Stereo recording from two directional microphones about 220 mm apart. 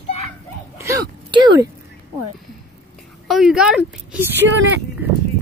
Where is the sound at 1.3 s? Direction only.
20° right (ahead or behind).